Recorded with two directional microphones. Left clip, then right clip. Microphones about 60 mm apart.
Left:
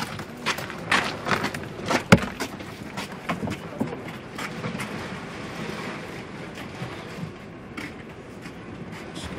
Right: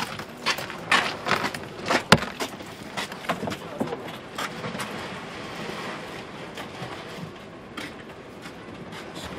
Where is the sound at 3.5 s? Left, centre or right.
Right.